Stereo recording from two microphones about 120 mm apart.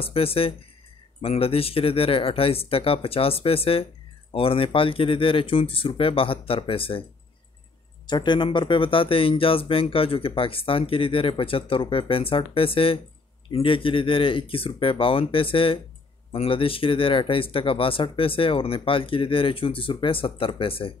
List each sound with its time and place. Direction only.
0.0 s speech: 50° left (ahead or behind)
8.1 s speech: 40° left (ahead or behind)